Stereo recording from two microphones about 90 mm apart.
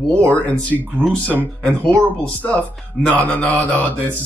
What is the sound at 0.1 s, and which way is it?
A man's voice, 15° left (ahead or behind).